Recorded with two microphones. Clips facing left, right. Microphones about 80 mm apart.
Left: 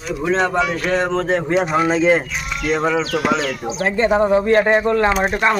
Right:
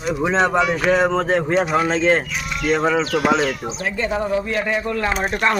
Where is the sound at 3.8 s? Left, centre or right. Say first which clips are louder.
Left 8 dB; left.